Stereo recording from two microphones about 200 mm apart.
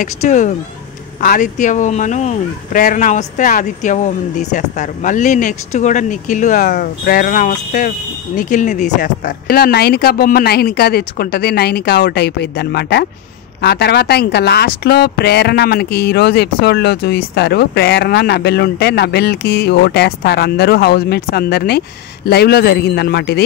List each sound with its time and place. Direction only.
0.0 s a woman's voice: 40° left (ahead or behind)